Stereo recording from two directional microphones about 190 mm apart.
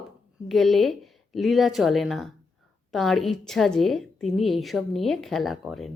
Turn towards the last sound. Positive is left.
turn(degrees=0)  # may be behind; listen again after turning